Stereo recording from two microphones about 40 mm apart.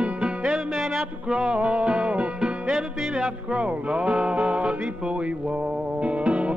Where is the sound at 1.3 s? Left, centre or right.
Centre.